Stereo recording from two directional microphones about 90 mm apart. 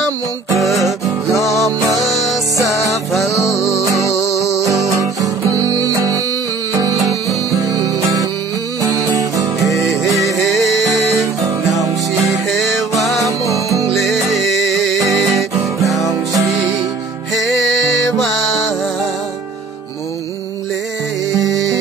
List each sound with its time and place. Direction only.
1.3 s music: 35° left (ahead or behind)
2.0 s music: centre (ahead or behind)
2.6 s music: 35° left (ahead or behind)
3.1 s music: centre (ahead or behind)
4.4 s music: 35° left (ahead or behind)
4.8 s music: 40° right (ahead or behind)
10.5 s music: centre (ahead or behind)
12.4 s music: centre (ahead or behind)
16.1 s music: 40° right (ahead or behind)
17.3 s music: centre (ahead or behind)